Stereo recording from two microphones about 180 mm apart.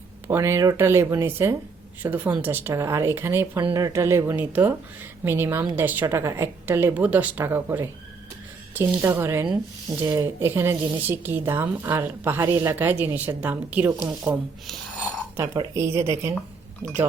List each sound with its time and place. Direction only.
0.3 s a woman's voice: 15° right (ahead or behind)
15.5 s a woman's voice: 15° right (ahead or behind)